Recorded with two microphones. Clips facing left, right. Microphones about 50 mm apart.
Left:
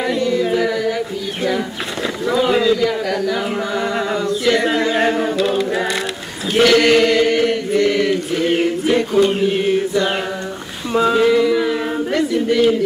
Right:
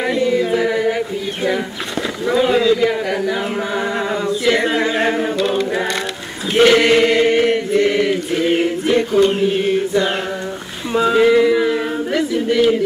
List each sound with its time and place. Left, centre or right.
0.0 s singing: centre
0.5 s a sound: centre
2.5 s a sound: centre
2.8 s chant: centre
5.4 s a capella: centre
6.6 s chant: centre
7.7 s mantra: centre
8.8 s a sound: centre
10.9 s speech: centre